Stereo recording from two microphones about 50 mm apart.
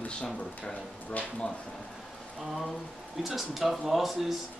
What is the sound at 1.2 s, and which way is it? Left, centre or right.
Speech, left.